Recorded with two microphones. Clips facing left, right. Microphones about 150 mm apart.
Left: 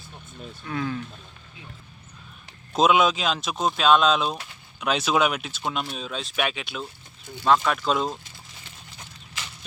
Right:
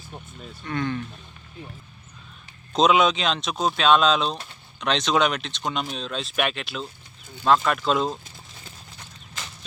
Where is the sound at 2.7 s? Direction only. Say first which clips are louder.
Right 1 dB; 5° left (ahead or behind).